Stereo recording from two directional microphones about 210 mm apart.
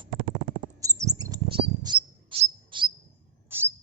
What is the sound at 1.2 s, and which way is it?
Bird, 20° right (ahead or behind).